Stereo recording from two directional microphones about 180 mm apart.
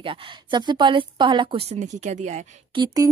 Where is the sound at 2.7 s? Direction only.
20° right (ahead or behind).